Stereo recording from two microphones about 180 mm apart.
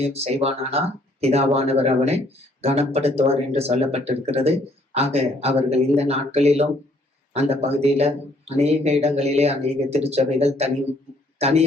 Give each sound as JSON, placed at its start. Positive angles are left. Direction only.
{"t": 0.1, "sound": "speech", "side_deg": -35}